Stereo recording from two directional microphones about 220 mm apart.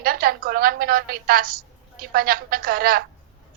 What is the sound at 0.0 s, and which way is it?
A woman's voice, 40° right (ahead or behind).